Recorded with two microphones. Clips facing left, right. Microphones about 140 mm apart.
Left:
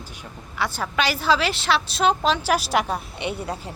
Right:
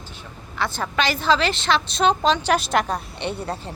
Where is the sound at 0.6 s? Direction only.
10° left (ahead or behind).